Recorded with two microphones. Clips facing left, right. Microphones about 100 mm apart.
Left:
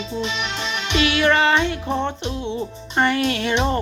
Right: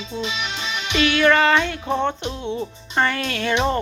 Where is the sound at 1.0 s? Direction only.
30° left (ahead or behind).